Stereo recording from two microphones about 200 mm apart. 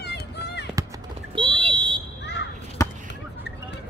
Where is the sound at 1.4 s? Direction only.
25° right (ahead or behind).